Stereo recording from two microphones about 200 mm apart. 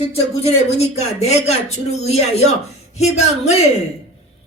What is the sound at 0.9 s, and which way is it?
Speech, 30° left (ahead or behind).